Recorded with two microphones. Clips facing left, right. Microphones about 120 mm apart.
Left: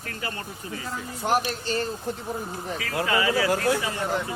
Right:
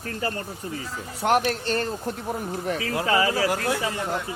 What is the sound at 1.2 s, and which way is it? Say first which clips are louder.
Speech: right 3 dB; 60° right (ahead or behind).